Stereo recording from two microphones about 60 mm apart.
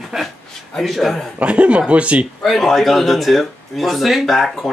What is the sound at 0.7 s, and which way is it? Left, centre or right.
Speech, centre.